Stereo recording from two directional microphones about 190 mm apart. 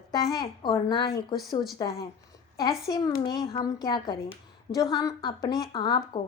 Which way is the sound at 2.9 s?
20° left (ahead or behind).